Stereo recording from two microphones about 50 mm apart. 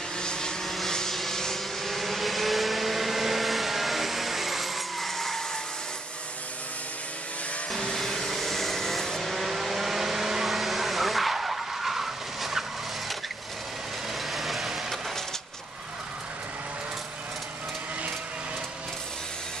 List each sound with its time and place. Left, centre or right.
0.2 s vehicle: centre
0.7 s vehicle: centre
7.7 s vehicle: centre
14.3 s vehicle: centre